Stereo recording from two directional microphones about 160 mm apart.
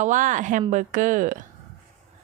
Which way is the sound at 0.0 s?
55° right (ahead or behind).